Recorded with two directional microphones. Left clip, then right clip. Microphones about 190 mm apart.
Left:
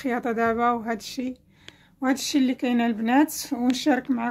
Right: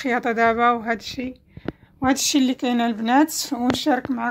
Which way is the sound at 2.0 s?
Centre (ahead or behind).